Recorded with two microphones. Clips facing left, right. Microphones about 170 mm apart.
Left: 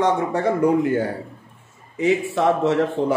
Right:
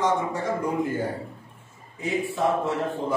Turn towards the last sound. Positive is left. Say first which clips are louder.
# left 8 dB
turn(degrees=85)